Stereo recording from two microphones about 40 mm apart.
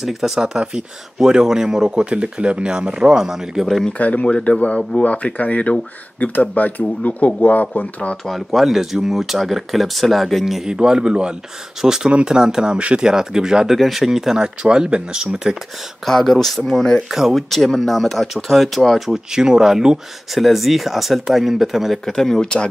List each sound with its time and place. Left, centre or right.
0.0 s speech: centre
4.0 s speech: left
8.3 s speech: centre
10.4 s speech: centre
11.8 s speech: centre
12.7 s speech: right
13.7 s speech: centre
14.4 s speech: right
16.1 s speech: centre
19.3 s speech: centre
20.3 s speech: centre
22.0 s speech: centre